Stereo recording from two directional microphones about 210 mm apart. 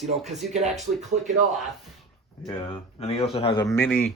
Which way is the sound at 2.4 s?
25° left (ahead or behind).